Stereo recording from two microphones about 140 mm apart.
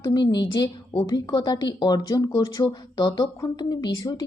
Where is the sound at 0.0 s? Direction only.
30° left (ahead or behind).